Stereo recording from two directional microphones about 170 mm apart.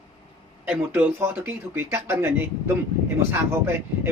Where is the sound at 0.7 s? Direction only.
10° right (ahead or behind).